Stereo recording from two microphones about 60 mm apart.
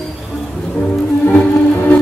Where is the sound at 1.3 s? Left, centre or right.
Left.